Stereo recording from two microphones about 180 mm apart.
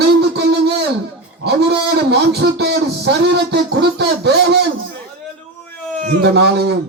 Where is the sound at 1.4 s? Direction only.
65° right (ahead or behind).